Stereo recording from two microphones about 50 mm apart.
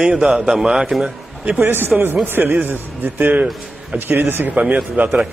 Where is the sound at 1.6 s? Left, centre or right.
Right.